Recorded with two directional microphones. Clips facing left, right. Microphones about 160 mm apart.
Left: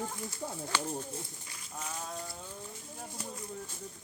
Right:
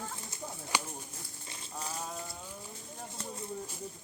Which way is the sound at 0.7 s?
15° right (ahead or behind).